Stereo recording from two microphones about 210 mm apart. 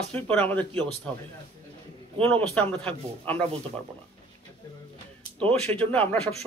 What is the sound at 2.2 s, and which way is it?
Speech, 5° left (ahead or behind).